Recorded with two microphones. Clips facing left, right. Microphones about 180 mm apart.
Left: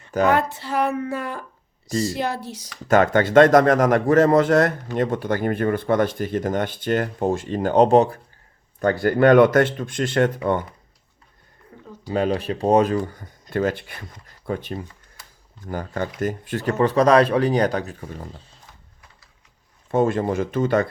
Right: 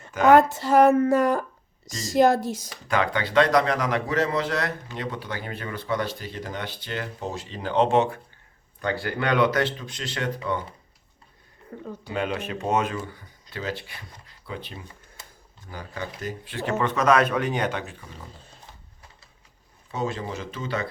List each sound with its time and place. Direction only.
0.3 s speech: 45° right (ahead or behind)
2.8 s speech: 45° left (ahead or behind)
11.7 s a sound: 55° right (ahead or behind)
12.1 s speech: 35° left (ahead or behind)
15.2 s a sound: 20° right (ahead or behind)
15.6 s speech: 50° left (ahead or behind)
19.9 s speech: 50° left (ahead or behind)